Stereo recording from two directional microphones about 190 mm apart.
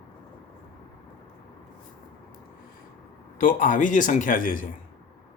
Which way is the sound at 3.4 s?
45° left (ahead or behind).